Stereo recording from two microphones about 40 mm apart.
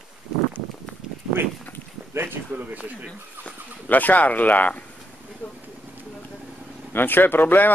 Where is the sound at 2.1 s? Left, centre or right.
Right.